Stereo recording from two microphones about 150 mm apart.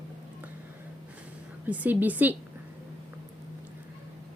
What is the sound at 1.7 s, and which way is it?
Speech, 10° right (ahead or behind).